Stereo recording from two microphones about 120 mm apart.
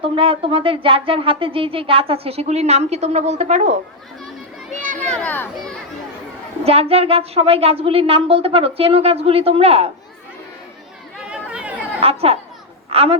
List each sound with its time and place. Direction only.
0.0 s speech: 50° right (ahead or behind); by 3.8 s 70° right (ahead or behind)
4.9 s a child's voice: 10° left (ahead or behind)
6.7 s speech: 55° right (ahead or behind)
11.2 s chatter: 10° right (ahead or behind)
12.0 s a woman's voice: 55° right (ahead or behind)